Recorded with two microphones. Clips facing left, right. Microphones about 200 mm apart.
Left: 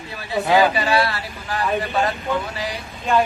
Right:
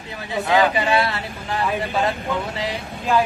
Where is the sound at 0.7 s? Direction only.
20° right (ahead or behind).